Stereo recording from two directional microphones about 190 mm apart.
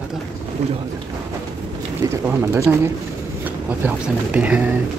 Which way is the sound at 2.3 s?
10° right (ahead or behind).